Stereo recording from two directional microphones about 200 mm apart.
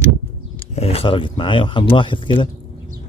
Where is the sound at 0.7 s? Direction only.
30° left (ahead or behind).